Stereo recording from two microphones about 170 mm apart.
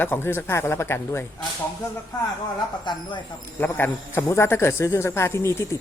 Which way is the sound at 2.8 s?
25° left (ahead or behind).